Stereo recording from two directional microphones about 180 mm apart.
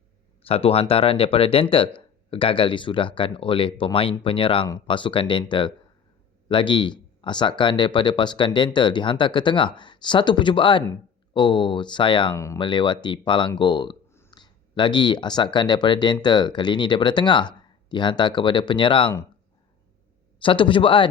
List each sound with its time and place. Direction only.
0.4 s speech: 30° left (ahead or behind)
20.4 s speech: 30° left (ahead or behind)